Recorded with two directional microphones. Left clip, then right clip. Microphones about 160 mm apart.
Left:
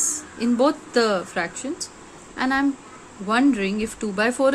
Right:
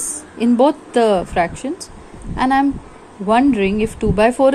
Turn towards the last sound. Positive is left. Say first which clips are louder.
# right 7 dB
turn(degrees=-15)  # may be behind; listen again after turning